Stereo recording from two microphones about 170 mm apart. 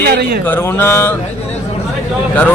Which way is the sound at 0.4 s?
10° left (ahead or behind).